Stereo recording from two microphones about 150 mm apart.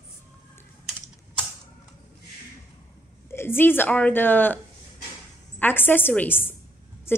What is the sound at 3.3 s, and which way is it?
A woman's voice, 15° left (ahead or behind).